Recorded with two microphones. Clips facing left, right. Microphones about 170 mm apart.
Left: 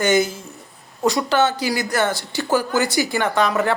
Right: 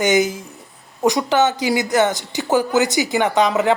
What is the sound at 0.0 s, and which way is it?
Speech, 15° right (ahead or behind).